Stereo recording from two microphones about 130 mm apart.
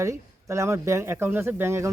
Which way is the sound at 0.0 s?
25° right (ahead or behind).